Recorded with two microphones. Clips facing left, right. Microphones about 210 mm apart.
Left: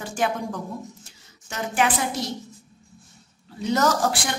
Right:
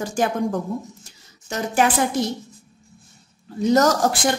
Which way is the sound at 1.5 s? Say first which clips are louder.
Right 4 dB; 40° right (ahead or behind).